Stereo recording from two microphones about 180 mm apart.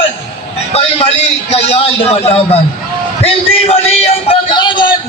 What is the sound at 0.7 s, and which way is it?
A man's voice, 35° left (ahead or behind).